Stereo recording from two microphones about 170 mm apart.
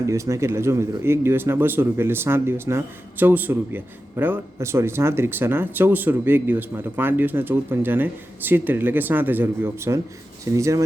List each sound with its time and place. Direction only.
0.1 s speech: 15° right (ahead or behind)